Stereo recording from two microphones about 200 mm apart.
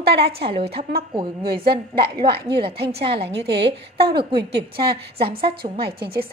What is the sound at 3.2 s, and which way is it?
Speech, 55° right (ahead or behind).